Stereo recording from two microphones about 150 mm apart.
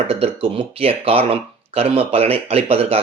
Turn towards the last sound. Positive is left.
turn(degrees=-40)  # may be behind; listen again after turning